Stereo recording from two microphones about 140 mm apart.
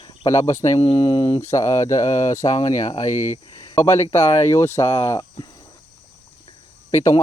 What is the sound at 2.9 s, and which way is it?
Speech, 55° left (ahead or behind).